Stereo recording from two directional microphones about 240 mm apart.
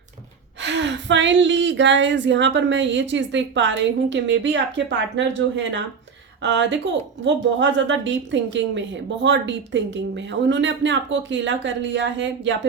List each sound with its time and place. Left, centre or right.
0.6 s speech: right